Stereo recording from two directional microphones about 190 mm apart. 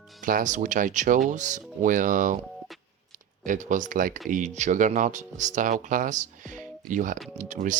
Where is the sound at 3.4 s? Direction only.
45° right (ahead or behind).